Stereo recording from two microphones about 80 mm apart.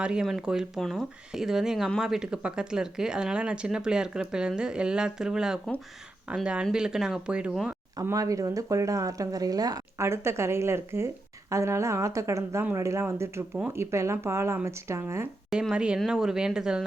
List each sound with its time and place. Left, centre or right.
0.0 s speech: centre
0.8 s speech: centre
1.3 s speech: centre
8.1 s speech: right
10.0 s speech: right
15.7 s speech: centre